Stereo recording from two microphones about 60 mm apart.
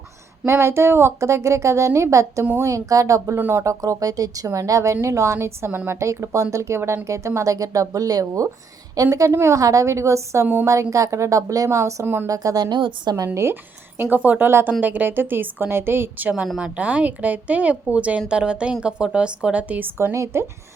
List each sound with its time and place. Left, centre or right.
0.4 s a woman's voice: right
5.6 s a woman's voice: right
6.0 s speech: right
10.4 s a woman's voice: right
10.7 s speech: right
12.0 s a woman's voice: right
12.3 s speech: right
13.2 s a woman's voice: right
14.2 s a woman's voice: right
20.0 s a woman's voice: right